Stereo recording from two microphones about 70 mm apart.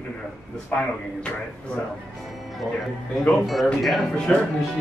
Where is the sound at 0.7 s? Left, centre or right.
Centre.